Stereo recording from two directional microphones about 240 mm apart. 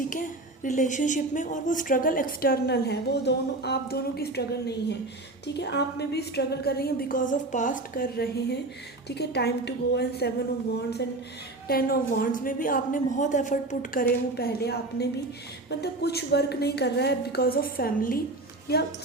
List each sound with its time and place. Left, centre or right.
0.1 s a woman's voice: left
11.7 s a woman's voice: left